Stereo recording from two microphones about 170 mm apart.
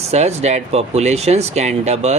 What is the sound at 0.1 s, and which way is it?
Speech, 40° right (ahead or behind).